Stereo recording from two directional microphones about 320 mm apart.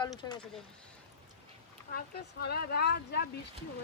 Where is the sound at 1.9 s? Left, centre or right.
Left.